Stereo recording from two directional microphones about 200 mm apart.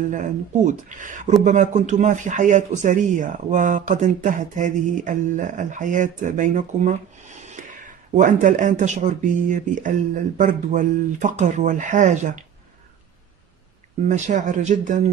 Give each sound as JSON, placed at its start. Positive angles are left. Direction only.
{"t": 0.1, "sound": "a man's voice", "side_deg": -40}
{"t": 14.0, "sound": "a man's voice", "side_deg": -40}